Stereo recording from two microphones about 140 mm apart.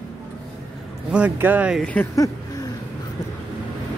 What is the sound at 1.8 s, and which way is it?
Speech, 10° left (ahead or behind).